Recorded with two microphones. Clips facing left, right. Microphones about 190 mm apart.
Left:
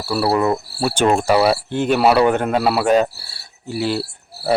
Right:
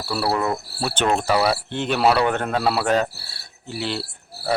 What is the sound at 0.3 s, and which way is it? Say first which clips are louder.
Insect: left 6 dB; 20° left (ahead or behind).